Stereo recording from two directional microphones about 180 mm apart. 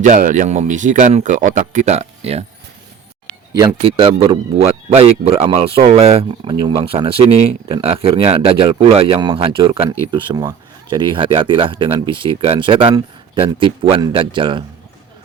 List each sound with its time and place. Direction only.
0.0 s speech: 45° right (ahead or behind)
3.8 s speech: 30° right (ahead or behind)